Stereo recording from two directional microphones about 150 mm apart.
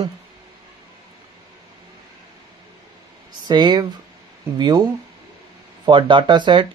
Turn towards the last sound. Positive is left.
turn(degrees=-30)  # may be behind; listen again after turning